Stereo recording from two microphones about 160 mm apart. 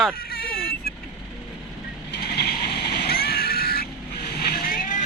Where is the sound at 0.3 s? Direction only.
70° left (ahead or behind).